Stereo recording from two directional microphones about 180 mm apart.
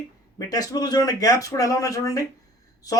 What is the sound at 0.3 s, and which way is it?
Speech, 20° left (ahead or behind).